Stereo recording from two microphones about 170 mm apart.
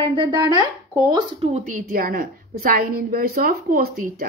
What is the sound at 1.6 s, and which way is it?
A woman's voice, 55° right (ahead or behind).